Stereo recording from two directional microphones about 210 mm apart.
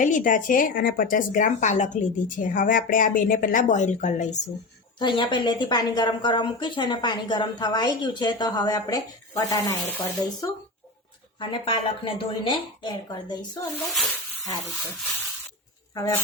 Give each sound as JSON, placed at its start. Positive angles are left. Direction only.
{"t": 0.0, "sound": "speech", "side_deg": 40}
{"t": 4.9, "sound": "a woman's voice", "side_deg": 20}
{"t": 11.3, "sound": "a woman's voice", "side_deg": 25}
{"t": 13.8, "sound": "speech", "side_deg": 0}
{"t": 16.0, "sound": "speech", "side_deg": 15}